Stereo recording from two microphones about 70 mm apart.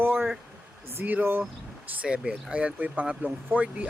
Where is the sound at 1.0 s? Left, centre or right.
Right.